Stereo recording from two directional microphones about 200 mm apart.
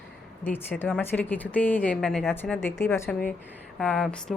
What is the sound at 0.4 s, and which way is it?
A woman's voice, 10° left (ahead or behind).